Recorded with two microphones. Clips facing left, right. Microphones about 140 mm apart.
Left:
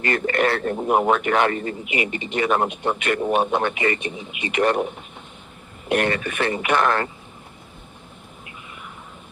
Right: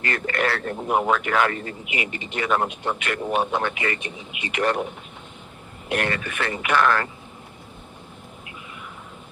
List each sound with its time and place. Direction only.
0.0 s speech: 25° left (ahead or behind)
5.9 s speech: 20° left (ahead or behind)